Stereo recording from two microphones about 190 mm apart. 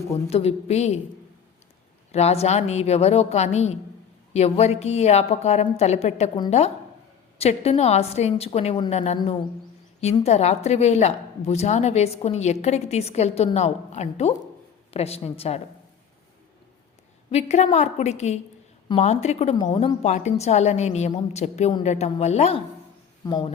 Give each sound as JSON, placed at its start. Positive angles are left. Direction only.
{"t": 0.3, "sound": "a woman's voice", "side_deg": 35}
{"t": 2.1, "sound": "a woman's voice", "side_deg": 35}
{"t": 7.3, "sound": "a woman's voice", "side_deg": 30}
{"t": 10.0, "sound": "a woman's voice", "side_deg": 35}
{"t": 17.3, "sound": "a woman's voice", "side_deg": 35}
{"t": 23.2, "sound": "speech", "side_deg": 25}